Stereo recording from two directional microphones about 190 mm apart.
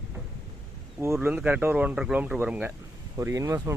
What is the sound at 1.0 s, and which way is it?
Speech, 10° right (ahead or behind).